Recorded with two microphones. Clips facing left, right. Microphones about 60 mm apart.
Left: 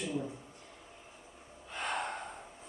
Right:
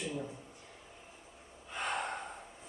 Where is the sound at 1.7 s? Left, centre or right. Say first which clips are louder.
Even; centre.